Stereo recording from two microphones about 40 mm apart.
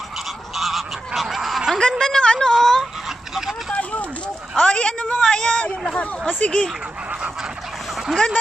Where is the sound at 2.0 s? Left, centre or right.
Centre.